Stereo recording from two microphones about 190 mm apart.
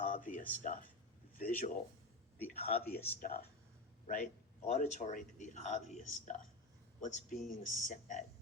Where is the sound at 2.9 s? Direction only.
50° left (ahead or behind).